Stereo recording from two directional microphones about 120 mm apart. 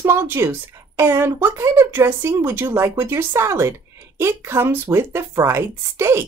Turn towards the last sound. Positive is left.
turn(degrees=-20)  # may be behind; listen again after turning